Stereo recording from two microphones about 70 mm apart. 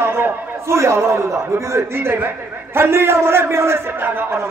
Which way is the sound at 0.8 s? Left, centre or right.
Right.